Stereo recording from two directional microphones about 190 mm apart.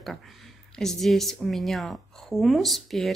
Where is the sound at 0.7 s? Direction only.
Centre (ahead or behind).